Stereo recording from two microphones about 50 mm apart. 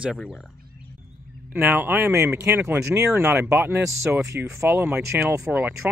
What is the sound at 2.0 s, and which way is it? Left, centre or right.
Speech, right.